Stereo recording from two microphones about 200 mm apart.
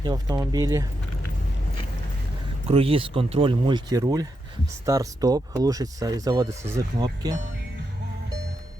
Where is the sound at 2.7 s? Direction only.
30° right (ahead or behind).